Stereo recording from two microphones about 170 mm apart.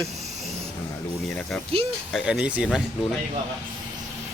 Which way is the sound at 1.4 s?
5° left (ahead or behind).